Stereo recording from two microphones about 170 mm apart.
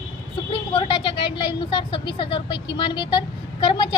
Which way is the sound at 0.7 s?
30° left (ahead or behind).